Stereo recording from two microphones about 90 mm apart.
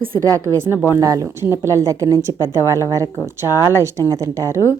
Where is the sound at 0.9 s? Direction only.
35° right (ahead or behind).